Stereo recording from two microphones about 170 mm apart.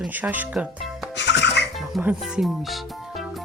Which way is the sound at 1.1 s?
90° left.